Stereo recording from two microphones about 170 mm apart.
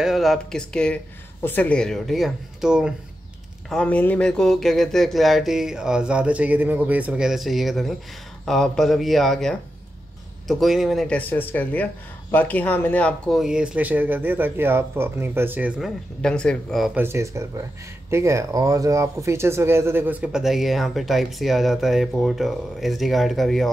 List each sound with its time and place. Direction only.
0.0 s speech: centre (ahead or behind)
16.2 s speech: 5° left (ahead or behind)
16.9 s speech: 15° right (ahead or behind)